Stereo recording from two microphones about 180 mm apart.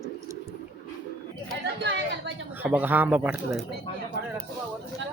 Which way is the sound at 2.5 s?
10° right (ahead or behind).